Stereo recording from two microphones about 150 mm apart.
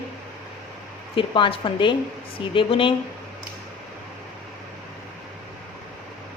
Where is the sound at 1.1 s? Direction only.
35° left (ahead or behind).